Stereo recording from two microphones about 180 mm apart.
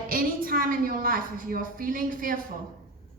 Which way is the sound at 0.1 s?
55° right (ahead or behind).